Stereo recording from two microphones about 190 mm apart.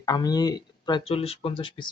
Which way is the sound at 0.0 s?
20° left (ahead or behind).